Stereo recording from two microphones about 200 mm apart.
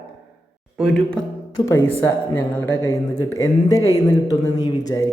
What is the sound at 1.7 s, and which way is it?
Speech, 15° left (ahead or behind).